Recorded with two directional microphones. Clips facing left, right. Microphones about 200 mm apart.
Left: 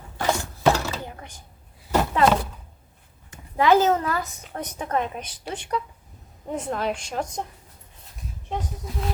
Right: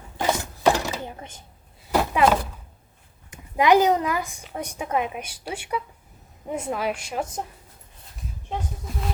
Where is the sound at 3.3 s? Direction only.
15° right (ahead or behind).